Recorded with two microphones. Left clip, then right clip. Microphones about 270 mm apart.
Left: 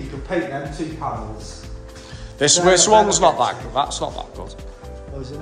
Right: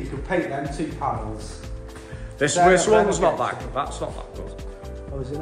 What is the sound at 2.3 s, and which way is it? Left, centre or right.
A man's voice, centre.